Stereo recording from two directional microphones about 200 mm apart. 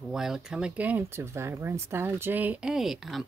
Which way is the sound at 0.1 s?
Centre (ahead or behind).